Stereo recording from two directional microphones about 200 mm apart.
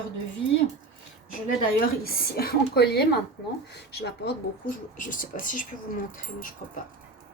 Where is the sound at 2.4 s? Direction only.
55° left (ahead or behind).